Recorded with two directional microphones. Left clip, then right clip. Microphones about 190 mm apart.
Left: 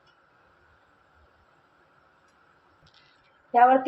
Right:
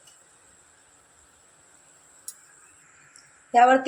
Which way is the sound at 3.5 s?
20° right (ahead or behind).